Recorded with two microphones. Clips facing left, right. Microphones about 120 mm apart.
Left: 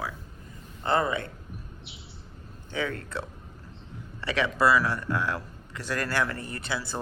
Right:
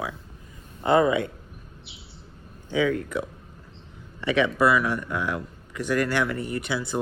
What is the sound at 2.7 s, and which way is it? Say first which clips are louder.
A man's voice: right 8 dB; 15° right (ahead or behind).